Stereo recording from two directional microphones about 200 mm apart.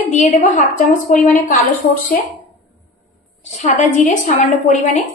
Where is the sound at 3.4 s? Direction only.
35° left (ahead or behind).